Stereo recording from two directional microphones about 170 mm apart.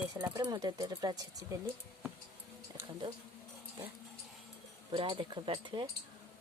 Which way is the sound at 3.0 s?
30° right (ahead or behind).